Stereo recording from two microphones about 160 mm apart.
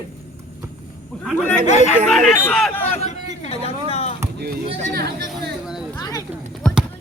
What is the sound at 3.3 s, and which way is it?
Speech, 40° left (ahead or behind).